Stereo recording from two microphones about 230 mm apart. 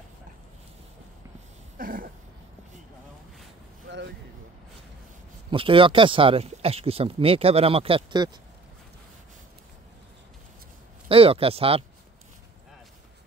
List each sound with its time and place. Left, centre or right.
1.8 s a sound: right
5.5 s speech: right
11.1 s speech: right